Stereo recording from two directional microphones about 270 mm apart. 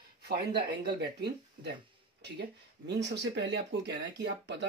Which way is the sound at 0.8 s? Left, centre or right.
Right.